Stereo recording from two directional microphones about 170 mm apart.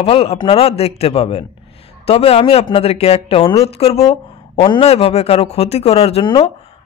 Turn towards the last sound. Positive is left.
turn(degrees=30)  # may be behind; listen again after turning